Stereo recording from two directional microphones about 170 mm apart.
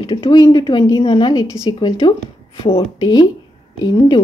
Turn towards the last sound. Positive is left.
turn(degrees=25)  # may be behind; listen again after turning